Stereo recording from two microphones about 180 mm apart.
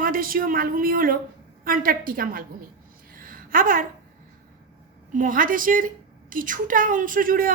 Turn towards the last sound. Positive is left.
turn(degrees=-50)  # may be behind; listen again after turning